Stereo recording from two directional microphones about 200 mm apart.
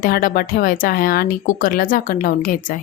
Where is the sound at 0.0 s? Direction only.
45° left (ahead or behind).